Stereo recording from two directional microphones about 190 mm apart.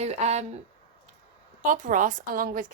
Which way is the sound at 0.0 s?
35° right (ahead or behind).